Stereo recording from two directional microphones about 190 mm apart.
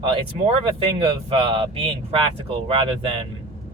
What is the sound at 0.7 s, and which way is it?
Speech, 30° right (ahead or behind).